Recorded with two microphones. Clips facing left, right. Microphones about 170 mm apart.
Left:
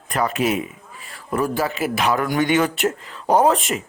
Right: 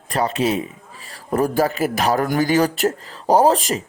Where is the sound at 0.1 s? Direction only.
30° right (ahead or behind).